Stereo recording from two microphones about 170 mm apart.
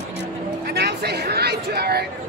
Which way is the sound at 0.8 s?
70° right (ahead or behind).